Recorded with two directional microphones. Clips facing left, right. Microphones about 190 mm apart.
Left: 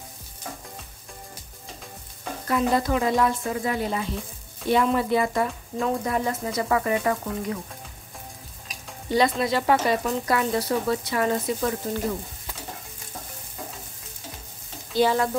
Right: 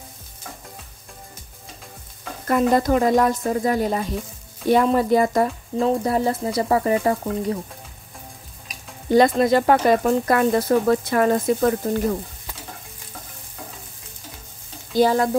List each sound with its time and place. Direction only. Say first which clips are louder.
2.4 s speech: right 5 dB; 50° right (ahead or behind); by 7.5 s 30° right (ahead or behind)
9.1 s speech: right 7 dB; 50° right (ahead or behind)
15.0 s speech: right 4 dB; 45° right (ahead or behind)